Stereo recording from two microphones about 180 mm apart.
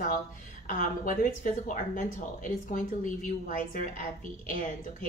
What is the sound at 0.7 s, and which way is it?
Speech, 50° left (ahead or behind).